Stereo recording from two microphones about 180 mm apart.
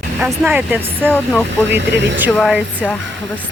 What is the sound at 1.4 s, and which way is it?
Speech, 80° right.